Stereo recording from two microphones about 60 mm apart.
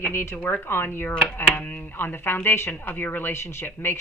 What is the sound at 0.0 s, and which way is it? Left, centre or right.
Speech, left.